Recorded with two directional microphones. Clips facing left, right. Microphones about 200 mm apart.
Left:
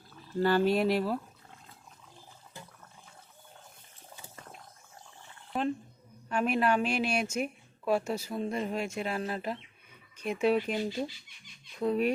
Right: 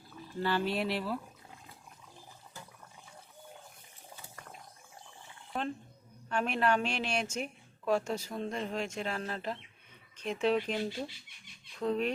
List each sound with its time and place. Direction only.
0.4 s speech: 45° left (ahead or behind)
5.5 s a sound: 5° left (ahead or behind)
6.2 s a woman's voice: 5° left (ahead or behind)